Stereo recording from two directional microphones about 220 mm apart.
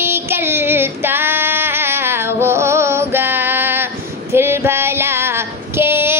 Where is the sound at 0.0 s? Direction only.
10° right (ahead or behind).